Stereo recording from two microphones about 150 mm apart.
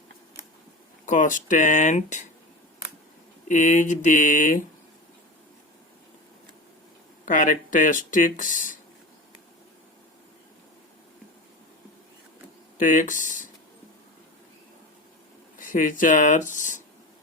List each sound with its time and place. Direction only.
1.0 s speech: 60° left (ahead or behind)
3.5 s speech: 55° left (ahead or behind)
7.3 s speech: 60° left (ahead or behind)
12.8 s speech: 60° left (ahead or behind)
15.5 s speech: 60° left (ahead or behind)